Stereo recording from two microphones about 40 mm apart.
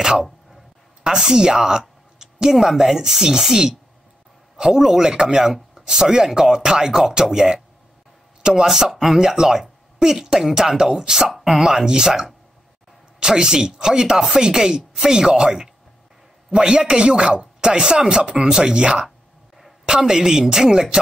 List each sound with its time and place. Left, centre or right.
0.0 s a sound: centre
1.0 s a woman's voice: centre
2.5 s speech: centre; by 8.6 s right
8.6 s speech: centre